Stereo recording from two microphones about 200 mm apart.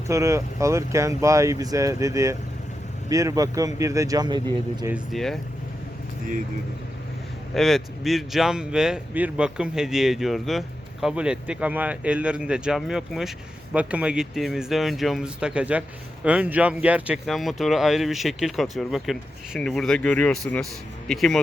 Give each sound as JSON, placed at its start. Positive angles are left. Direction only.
{"t": 0.1, "sound": "speech", "side_deg": -15}
{"t": 5.1, "sound": "speech", "side_deg": 0}
{"t": 7.5, "sound": "speech", "side_deg": 0}